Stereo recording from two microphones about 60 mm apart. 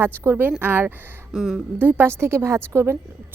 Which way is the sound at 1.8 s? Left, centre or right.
Right.